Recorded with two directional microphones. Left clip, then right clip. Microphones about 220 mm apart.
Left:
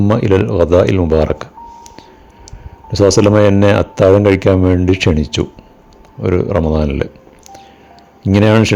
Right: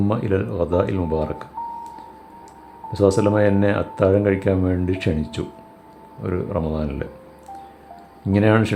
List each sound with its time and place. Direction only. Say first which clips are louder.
0.1 s speech: left 10 dB; 35° left (ahead or behind)
2.9 s speech: left 8 dB; 30° left (ahead or behind)
8.2 s speech: left 7 dB; 35° left (ahead or behind)